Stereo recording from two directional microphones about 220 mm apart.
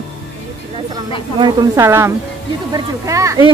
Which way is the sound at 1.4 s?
20° right (ahead or behind).